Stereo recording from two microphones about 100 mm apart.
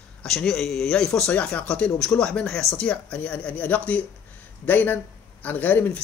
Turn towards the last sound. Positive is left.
turn(degrees=15)  # may be behind; listen again after turning